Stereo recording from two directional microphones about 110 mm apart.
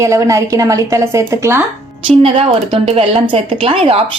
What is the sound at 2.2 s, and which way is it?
Speech, 60° right (ahead or behind).